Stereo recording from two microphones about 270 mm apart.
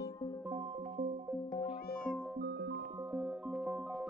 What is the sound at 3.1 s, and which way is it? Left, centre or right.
Music, centre.